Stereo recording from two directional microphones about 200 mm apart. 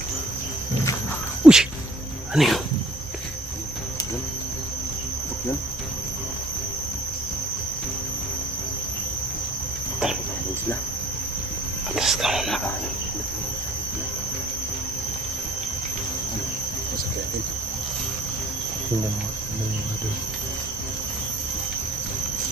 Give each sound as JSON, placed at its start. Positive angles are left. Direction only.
{"t": 1.4, "sound": "insect", "side_deg": -5}
{"t": 2.3, "sound": "speech", "side_deg": 0}
{"t": 11.9, "sound": "cricket", "side_deg": 0}